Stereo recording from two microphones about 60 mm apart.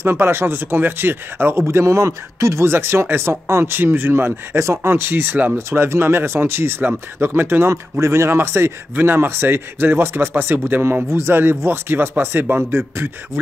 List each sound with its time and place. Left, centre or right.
0.0 s speech: right
1.7 s speech: right
3.7 s speech: right
4.9 s speech: right